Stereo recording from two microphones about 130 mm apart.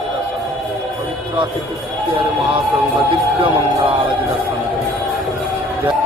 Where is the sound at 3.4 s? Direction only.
45° right (ahead or behind).